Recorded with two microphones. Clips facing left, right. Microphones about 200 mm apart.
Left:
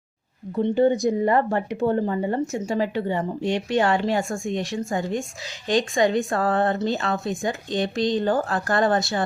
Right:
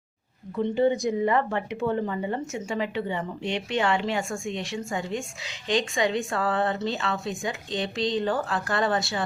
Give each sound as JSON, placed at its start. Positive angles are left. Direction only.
{"t": 0.5, "sound": "speech", "side_deg": 35}